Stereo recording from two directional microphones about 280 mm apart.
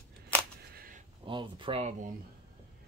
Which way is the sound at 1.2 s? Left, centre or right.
Centre.